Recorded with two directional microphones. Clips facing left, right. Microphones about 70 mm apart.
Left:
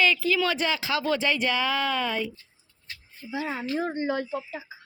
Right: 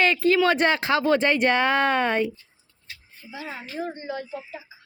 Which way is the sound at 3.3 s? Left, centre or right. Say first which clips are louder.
Left 6 dB; left.